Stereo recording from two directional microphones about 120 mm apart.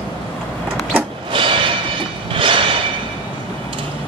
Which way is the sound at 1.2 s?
45° right (ahead or behind).